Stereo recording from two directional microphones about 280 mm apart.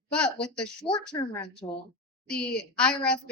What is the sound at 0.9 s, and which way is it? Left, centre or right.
Speech, centre.